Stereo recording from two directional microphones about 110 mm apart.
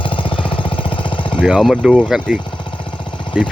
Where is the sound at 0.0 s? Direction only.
50° left (ahead or behind).